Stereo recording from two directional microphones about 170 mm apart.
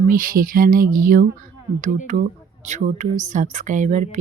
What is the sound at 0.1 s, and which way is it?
Speech, 55° right (ahead or behind).